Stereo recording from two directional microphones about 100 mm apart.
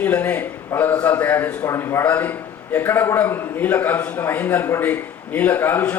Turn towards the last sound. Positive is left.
turn(degrees=20)  # may be behind; listen again after turning